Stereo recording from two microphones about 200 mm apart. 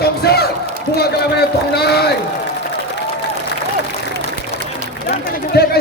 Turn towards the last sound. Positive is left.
turn(degrees=50)  # may be behind; listen again after turning